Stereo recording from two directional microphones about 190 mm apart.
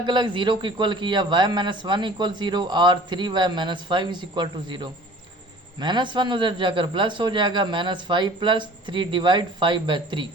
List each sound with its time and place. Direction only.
0.0 s a man's voice: 25° right (ahead or behind)